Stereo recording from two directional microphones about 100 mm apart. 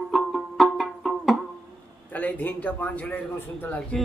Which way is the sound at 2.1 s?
15° left (ahead or behind).